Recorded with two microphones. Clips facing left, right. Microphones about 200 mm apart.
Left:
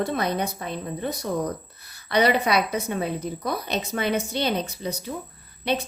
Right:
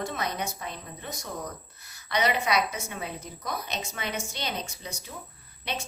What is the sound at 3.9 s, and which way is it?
Speech, 35° left (ahead or behind).